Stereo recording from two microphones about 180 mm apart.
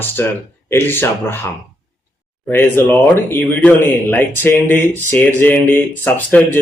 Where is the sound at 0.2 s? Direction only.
15° left (ahead or behind).